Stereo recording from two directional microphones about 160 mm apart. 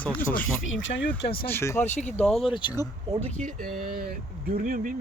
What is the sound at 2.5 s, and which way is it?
Speech, 30° left (ahead or behind).